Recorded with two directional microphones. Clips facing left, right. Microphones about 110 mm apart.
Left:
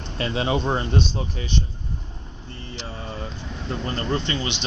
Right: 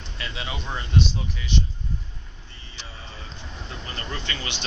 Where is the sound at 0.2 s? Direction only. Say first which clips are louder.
Left 11 dB; 35° left (ahead or behind).